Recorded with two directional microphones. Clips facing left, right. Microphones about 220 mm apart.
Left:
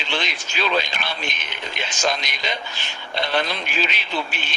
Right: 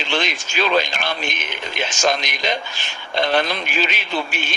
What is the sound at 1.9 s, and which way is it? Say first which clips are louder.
Speech: right 3 dB; 50° right (ahead or behind).